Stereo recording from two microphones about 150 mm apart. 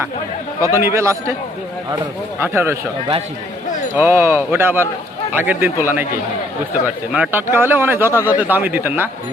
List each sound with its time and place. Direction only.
0.6 s a man's voice: 15° right (ahead or behind)
2.4 s a man's voice: 15° right (ahead or behind)
3.9 s a man's voice: 15° right (ahead or behind)